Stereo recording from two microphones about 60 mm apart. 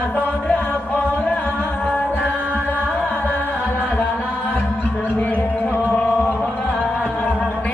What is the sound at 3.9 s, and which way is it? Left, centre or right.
Music, left.